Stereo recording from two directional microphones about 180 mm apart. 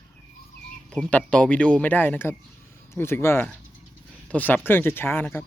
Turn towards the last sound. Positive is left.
turn(degrees=10)  # may be behind; listen again after turning